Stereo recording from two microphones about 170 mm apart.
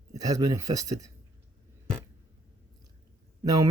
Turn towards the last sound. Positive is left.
turn(degrees=-20)  # may be behind; listen again after turning